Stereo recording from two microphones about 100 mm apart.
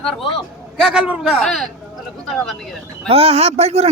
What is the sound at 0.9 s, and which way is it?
Speech, 10° right (ahead or behind).